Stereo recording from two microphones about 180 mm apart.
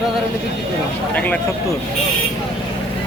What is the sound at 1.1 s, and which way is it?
Speech, 10° left (ahead or behind).